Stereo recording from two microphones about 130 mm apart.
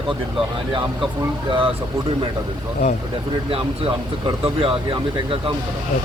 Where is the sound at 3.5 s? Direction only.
45° right (ahead or behind).